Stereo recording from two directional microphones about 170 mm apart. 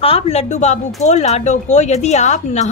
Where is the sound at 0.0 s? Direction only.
35° left (ahead or behind).